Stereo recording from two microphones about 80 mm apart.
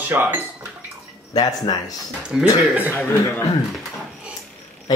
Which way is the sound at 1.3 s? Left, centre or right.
Left.